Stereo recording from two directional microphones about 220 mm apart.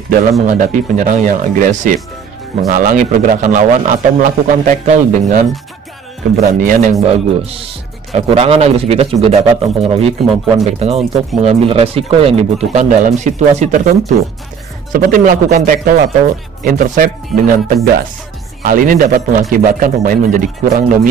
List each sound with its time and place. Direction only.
0.5 s a man's voice: 35° right (ahead or behind)
6.6 s a man's voice: 35° right (ahead or behind)